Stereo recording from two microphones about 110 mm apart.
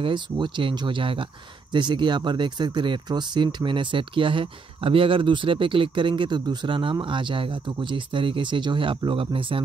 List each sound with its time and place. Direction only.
0.0 s speech: 45° right (ahead or behind)